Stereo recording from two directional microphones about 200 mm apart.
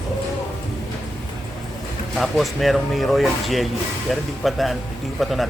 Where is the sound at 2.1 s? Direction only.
Centre (ahead or behind).